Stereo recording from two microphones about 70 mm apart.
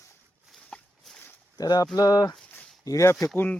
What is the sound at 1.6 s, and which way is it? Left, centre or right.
Speech, left.